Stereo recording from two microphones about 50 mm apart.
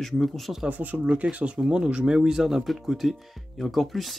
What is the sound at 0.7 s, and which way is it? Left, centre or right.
Speech, right.